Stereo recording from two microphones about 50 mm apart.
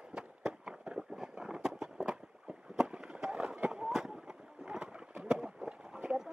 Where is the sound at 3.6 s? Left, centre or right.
Centre.